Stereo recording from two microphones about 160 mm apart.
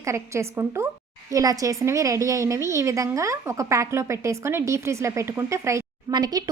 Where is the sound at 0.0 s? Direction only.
15° right (ahead or behind).